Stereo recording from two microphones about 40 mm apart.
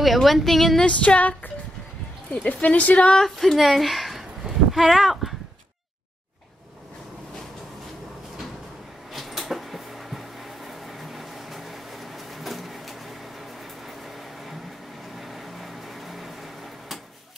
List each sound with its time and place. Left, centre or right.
0.0 s a woman's voice: centre
0.8 s a woman's voice: left
2.4 s a woman's voice: left
3.3 s a sound: centre
4.9 s speech: centre
9.1 s a sound: centre
15.1 s microwave oven: centre